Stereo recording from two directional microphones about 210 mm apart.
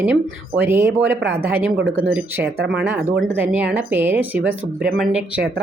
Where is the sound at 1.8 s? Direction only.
70° right (ahead or behind).